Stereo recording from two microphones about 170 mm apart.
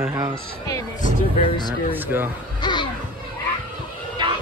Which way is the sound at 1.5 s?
25° left (ahead or behind).